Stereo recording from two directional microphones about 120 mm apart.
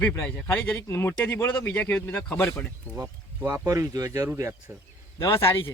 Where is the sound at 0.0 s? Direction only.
15° left (ahead or behind).